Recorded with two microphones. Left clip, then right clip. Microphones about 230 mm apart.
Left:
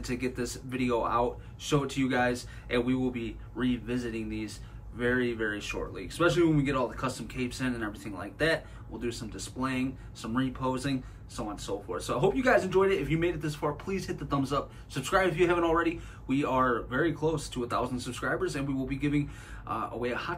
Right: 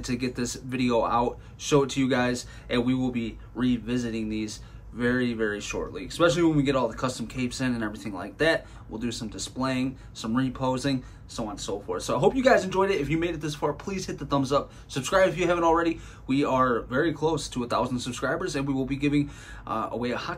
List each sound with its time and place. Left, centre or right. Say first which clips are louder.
0.0 s speech: right 3 dB; right